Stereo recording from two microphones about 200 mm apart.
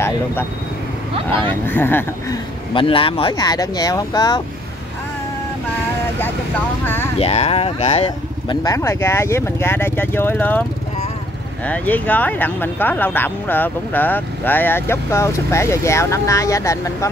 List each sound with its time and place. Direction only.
1.1 s speech: 25° right (ahead or behind)
1.7 s speech: 10° left (ahead or behind)
2.7 s speech: 25° left (ahead or behind)
7.2 s speech: 30° left (ahead or behind); by 10.6 s 10° left (ahead or behind)
11.6 s speech: 5° left (ahead or behind)